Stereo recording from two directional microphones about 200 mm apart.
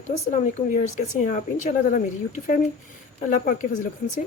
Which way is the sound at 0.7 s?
35° left (ahead or behind).